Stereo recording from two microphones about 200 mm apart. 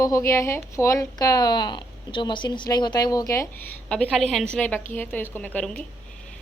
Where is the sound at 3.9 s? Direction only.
5° left (ahead or behind).